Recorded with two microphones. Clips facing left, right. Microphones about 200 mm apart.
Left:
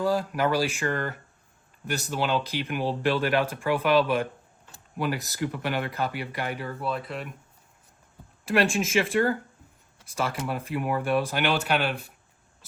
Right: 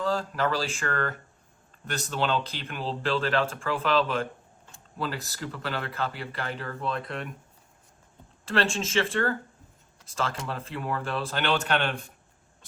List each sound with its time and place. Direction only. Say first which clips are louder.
0.0 s speech: left 3 dB; 15° left (ahead or behind)
8.4 s speech: left 3 dB; 15° left (ahead or behind)